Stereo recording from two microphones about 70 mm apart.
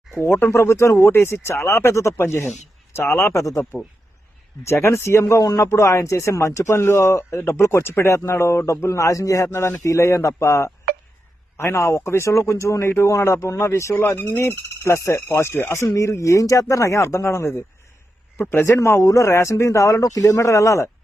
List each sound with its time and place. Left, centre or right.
0.2 s speech: left
3.2 s speech: left
4.6 s speech: left
19.0 s speech: left